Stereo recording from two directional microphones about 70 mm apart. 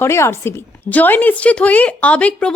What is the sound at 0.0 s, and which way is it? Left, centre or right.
Speech, left.